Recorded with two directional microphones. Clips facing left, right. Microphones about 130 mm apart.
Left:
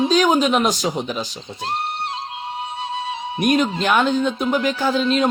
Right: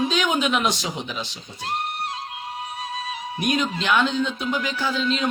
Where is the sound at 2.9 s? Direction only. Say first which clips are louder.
Left 5 dB; 25° left (ahead or behind).